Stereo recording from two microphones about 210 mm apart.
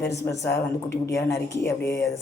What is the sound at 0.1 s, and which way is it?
Speech, 15° left (ahead or behind).